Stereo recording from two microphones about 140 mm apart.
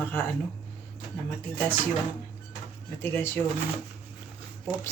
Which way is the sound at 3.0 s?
15° left (ahead or behind).